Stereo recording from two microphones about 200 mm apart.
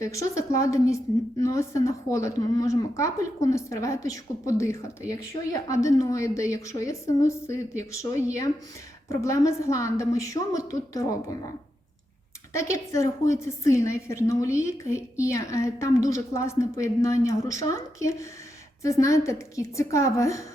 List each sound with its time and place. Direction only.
0.0 s a woman's voice: 15° left (ahead or behind)
12.5 s a woman's voice: 15° left (ahead or behind)